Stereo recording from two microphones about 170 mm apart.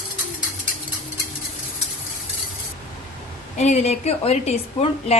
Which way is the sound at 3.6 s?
40° left (ahead or behind).